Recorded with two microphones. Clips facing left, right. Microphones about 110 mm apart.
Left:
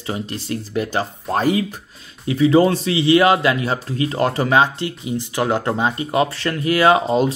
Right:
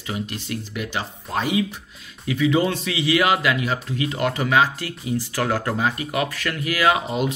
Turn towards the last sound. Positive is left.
turn(degrees=35)  # may be behind; listen again after turning